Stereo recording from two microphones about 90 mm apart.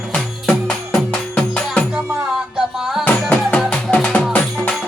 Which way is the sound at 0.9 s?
10° left (ahead or behind).